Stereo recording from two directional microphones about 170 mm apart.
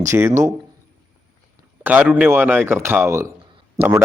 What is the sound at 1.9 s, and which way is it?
A man's voice, 10° right (ahead or behind).